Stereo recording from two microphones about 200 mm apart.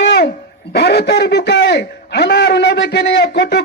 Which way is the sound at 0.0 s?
60° left (ahead or behind).